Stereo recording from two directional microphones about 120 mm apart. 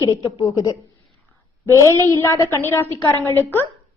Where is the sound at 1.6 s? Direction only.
25° left (ahead or behind).